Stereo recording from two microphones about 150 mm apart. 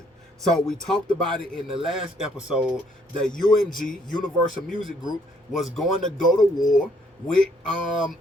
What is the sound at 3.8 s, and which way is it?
Speech, 65° left (ahead or behind).